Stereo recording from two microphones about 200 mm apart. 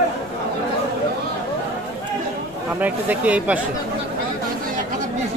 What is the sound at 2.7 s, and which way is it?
Speech, 10° right (ahead or behind).